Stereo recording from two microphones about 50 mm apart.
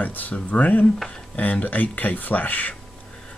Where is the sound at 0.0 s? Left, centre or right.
Left.